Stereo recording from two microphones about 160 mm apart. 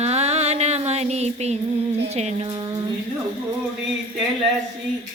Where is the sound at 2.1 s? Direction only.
45° right (ahead or behind).